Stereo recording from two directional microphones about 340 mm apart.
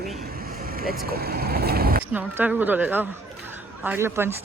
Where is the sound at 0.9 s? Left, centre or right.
Right.